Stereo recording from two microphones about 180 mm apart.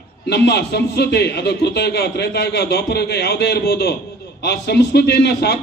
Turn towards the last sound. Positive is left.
turn(degrees=65)  # may be behind; listen again after turning